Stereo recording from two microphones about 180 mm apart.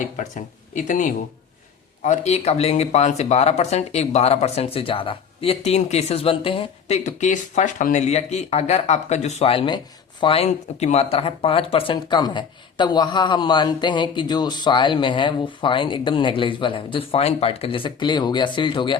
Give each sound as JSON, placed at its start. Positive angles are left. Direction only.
{"t": 0.0, "sound": "speech", "side_deg": 45}